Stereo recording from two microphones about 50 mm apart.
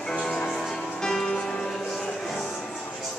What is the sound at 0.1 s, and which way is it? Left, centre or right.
Music, centre.